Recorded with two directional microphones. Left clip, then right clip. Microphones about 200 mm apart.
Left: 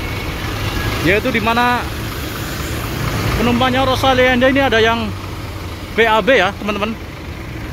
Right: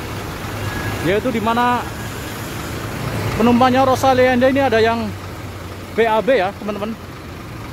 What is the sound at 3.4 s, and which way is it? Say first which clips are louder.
Speech: right 2 dB; 20° right (ahead or behind).